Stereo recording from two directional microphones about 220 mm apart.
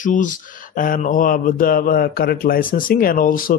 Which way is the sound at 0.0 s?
35° left (ahead or behind).